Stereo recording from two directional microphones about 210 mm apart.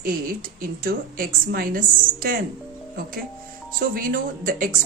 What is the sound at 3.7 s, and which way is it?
A woman's voice, 45° right (ahead or behind).